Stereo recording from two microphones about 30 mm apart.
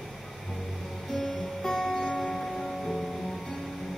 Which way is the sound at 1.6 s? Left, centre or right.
Left.